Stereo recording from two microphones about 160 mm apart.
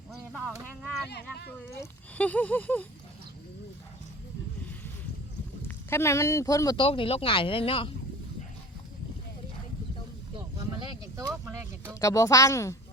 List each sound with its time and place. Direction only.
0.3 s a sound: 5° left (ahead or behind)
1.1 s speech: 90° left
1.8 s speech: 10° left (ahead or behind)
5.6 s speech: 15° left (ahead or behind)
6.8 s speech: 35° left (ahead or behind)
10.8 s a sound: 20° right (ahead or behind)
11.4 s speech: 15° right (ahead or behind)
11.9 s speech: 20° left (ahead or behind)